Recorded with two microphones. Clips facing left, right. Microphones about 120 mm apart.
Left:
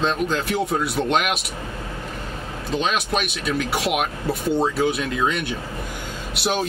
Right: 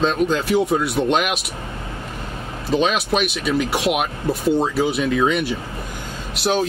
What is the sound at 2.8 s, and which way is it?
Speech, 5° right (ahead or behind).